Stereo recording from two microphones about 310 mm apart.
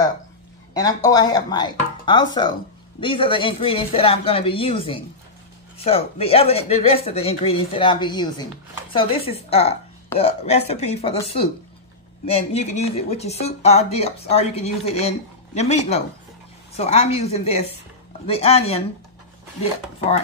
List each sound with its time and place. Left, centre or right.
0.7 s speech: centre
12.4 s speech: left